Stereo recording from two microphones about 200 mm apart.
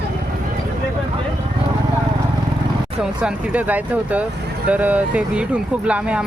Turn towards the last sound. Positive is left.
turn(degrees=-5)  # may be behind; listen again after turning